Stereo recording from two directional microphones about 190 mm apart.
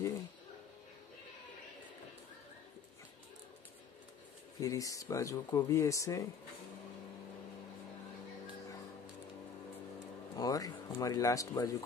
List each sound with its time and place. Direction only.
4.6 s speech: 15° left (ahead or behind)
10.3 s speech: 20° left (ahead or behind)